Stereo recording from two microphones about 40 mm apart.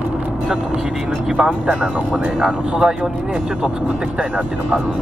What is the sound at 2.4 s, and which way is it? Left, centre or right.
Speech, centre.